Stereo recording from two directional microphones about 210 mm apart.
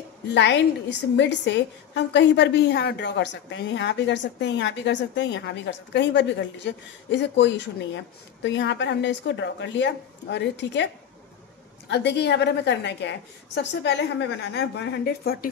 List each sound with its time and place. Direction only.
0.3 s a woman's voice: 55° left (ahead or behind)
11.9 s a woman's voice: 55° left (ahead or behind)